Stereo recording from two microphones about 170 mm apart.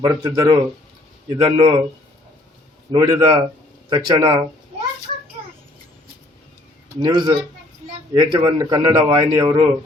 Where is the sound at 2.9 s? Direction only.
20° right (ahead or behind).